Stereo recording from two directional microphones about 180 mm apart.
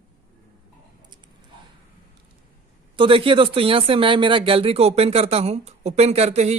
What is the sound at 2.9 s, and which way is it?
Speech, 30° right (ahead or behind).